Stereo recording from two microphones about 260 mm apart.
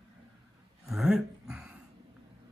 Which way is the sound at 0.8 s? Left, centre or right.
Centre.